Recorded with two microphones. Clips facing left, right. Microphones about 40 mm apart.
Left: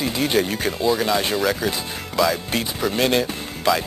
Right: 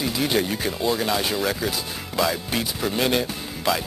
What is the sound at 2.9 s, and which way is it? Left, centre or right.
Speech, centre.